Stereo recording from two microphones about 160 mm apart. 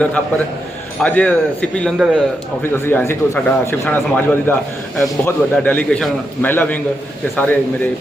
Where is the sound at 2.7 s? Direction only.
15° left (ahead or behind).